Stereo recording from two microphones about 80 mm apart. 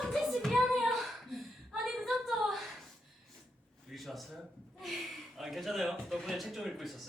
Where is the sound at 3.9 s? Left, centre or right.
Centre.